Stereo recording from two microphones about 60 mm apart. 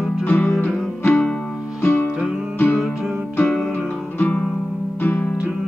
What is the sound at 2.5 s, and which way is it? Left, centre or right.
Music, left.